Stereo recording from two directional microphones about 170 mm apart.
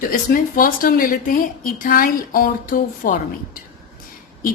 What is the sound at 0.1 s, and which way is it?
A woman's voice, 55° left (ahead or behind).